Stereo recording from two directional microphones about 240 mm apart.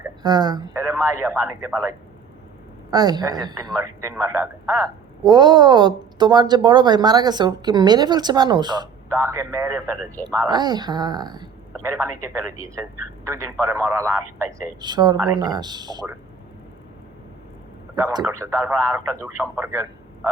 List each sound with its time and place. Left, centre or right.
0.2 s a woman's voice: centre
17.9 s a man's voice: centre